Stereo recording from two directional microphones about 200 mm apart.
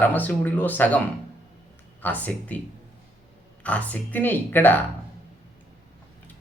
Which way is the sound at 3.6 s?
5° left (ahead or behind).